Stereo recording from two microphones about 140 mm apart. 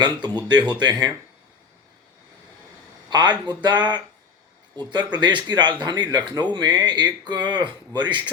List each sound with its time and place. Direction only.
0.0 s speech: 30° right (ahead or behind)
3.1 s speech: 30° right (ahead or behind)